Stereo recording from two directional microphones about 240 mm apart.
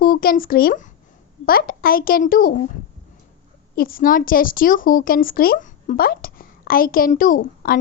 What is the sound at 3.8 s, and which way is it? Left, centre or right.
Speech, left.